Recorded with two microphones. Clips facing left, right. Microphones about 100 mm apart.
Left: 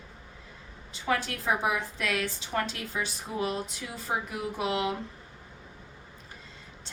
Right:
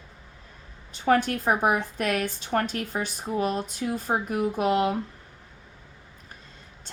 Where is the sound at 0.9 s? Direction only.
50° right (ahead or behind).